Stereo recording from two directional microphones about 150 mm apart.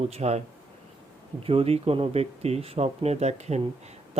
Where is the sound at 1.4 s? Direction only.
40° right (ahead or behind).